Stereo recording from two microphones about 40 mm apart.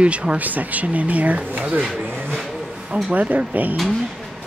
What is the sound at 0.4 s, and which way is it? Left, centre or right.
Speech, right.